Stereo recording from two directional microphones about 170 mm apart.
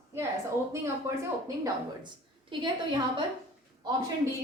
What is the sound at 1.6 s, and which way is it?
A woman's voice, 25° right (ahead or behind).